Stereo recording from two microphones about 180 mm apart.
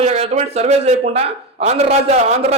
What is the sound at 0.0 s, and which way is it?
A man's voice, 35° right (ahead or behind).